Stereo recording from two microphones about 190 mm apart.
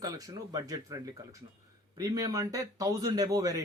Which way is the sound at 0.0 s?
20° right (ahead or behind).